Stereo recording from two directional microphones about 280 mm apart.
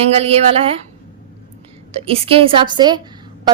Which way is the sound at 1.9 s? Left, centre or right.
Right.